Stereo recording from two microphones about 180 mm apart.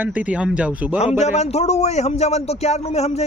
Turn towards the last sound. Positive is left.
turn(degrees=35)  # may be behind; listen again after turning